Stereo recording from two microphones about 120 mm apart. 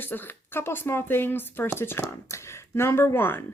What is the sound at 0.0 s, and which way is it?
Speech, 15° left (ahead or behind).